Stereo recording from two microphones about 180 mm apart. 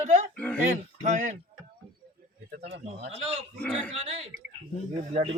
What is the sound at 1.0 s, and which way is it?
Speech, 40° right (ahead or behind).